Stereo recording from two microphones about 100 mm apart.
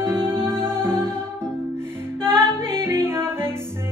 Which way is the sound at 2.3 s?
25° right (ahead or behind).